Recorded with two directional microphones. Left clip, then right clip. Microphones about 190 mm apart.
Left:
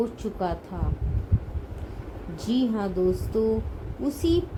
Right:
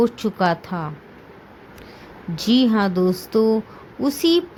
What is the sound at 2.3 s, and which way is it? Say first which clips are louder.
A woman's voice: right 9 dB; 50° right (ahead or behind).